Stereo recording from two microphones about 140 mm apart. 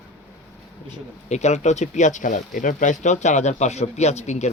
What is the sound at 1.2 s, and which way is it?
Speech, 55° left (ahead or behind).